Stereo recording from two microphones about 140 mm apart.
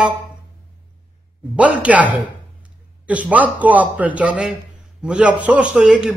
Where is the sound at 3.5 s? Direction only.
10° right (ahead or behind).